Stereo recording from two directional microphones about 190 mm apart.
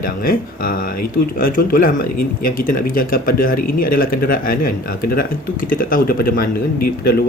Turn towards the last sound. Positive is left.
turn(degrees=55)  # may be behind; listen again after turning